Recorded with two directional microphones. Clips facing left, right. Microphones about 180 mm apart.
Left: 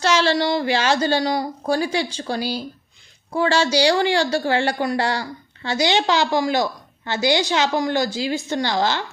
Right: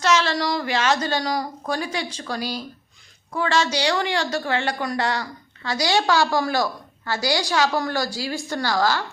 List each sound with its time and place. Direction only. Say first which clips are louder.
0.0 s a woman's voice: left 2 dB; 30° left (ahead or behind)